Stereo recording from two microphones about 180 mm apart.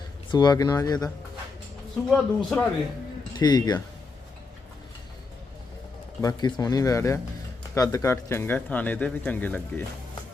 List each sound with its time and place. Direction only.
0.3 s speech: 25° left (ahead or behind)
2.0 s speech: centre (ahead or behind)
3.3 s speech: 25° left (ahead or behind)
6.2 s speech: 20° left (ahead or behind)